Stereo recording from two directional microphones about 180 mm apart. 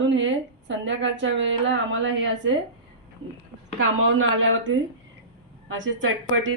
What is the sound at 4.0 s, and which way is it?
A woman's voice, 90° right.